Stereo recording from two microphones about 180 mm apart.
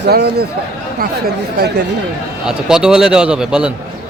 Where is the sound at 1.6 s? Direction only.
70° right (ahead or behind).